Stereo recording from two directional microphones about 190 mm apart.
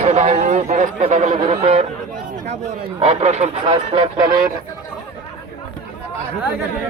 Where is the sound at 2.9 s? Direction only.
30° right (ahead or behind).